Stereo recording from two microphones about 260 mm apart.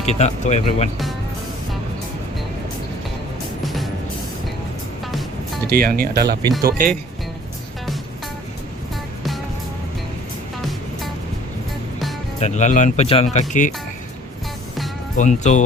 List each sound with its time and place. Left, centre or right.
0.0 s speech: left
5.6 s speech: right
12.4 s speech: left
15.1 s speech: left